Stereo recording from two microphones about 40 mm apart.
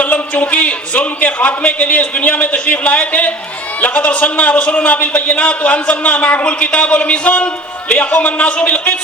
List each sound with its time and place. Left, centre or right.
0.0 s a man's voice: left